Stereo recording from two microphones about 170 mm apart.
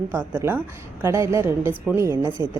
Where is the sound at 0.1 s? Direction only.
15° right (ahead or behind).